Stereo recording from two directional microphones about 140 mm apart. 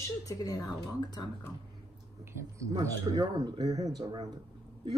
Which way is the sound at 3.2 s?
25° right (ahead or behind).